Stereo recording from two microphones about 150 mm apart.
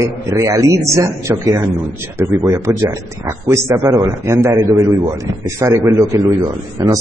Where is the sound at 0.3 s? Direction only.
20° right (ahead or behind).